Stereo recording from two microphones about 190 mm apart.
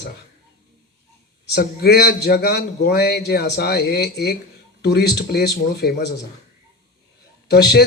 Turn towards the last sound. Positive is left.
turn(degrees=60)  # may be behind; listen again after turning